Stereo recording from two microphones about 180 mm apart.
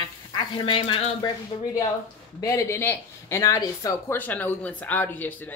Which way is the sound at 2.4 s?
15° left (ahead or behind).